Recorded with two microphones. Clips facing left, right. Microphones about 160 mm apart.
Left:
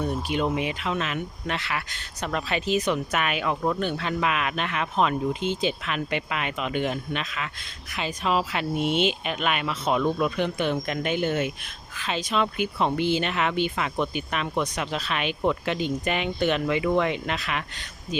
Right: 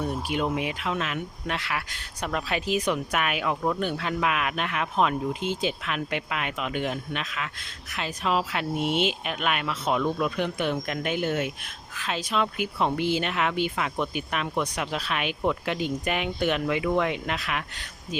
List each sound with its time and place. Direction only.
0.0 s speech: 5° right (ahead or behind)